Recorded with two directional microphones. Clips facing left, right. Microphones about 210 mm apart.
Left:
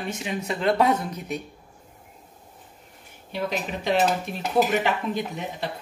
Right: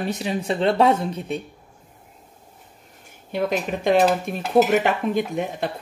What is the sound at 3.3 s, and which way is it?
Speech, 50° right (ahead or behind).